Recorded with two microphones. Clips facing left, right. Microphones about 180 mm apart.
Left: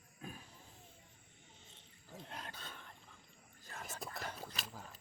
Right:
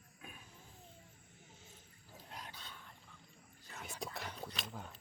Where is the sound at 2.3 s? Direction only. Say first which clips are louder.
Even; 55° left (ahead or behind).